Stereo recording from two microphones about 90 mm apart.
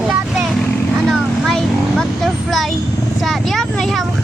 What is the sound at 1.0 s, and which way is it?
Vehicle, 5° left (ahead or behind).